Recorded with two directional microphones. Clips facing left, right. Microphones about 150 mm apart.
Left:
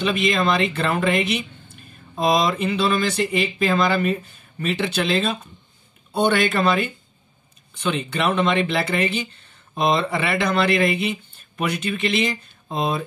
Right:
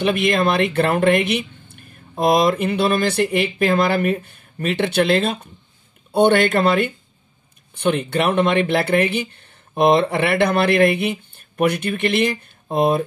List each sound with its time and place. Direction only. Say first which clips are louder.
0.0 s speech: right 3 dB; 60° right (ahead or behind)